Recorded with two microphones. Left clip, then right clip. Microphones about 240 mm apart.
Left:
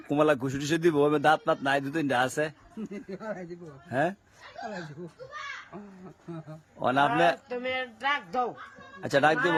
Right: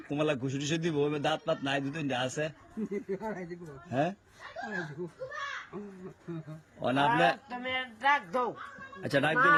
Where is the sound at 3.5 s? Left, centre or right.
Centre.